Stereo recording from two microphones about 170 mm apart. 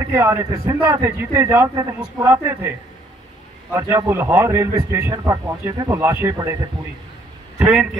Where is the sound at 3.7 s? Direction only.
15° right (ahead or behind).